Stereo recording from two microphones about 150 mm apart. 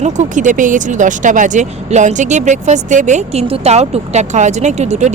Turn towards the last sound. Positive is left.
turn(degrees=-50)  # may be behind; listen again after turning